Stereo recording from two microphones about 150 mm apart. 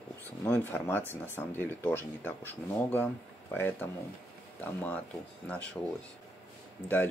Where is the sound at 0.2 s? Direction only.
15° left (ahead or behind).